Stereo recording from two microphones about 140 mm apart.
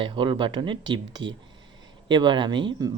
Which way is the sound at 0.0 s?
35° right (ahead or behind).